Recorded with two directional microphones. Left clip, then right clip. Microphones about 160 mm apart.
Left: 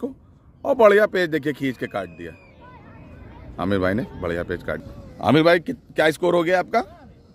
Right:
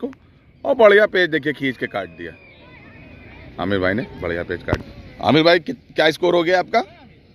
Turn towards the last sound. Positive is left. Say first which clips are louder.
# right 3 dB
turn(degrees=15)  # may be behind; listen again after turning